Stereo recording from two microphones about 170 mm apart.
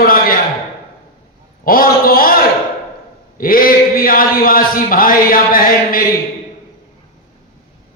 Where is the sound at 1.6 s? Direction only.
60° left (ahead or behind).